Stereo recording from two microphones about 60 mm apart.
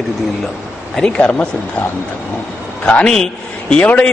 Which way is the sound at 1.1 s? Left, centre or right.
Left.